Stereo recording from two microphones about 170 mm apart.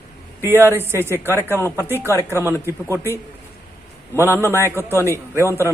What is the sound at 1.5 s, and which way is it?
Speech, 15° left (ahead or behind).